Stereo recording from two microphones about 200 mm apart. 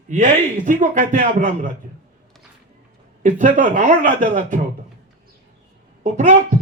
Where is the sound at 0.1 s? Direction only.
40° right (ahead or behind).